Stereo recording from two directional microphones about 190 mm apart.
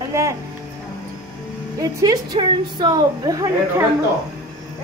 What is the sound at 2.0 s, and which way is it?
A woman's voice, 20° right (ahead or behind).